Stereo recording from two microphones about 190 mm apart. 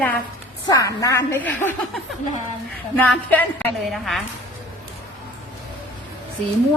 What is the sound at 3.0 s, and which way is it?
A woman's voice, 10° left (ahead or behind).